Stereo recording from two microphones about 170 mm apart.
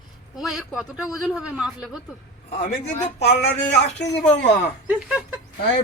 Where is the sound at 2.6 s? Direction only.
50° left (ahead or behind).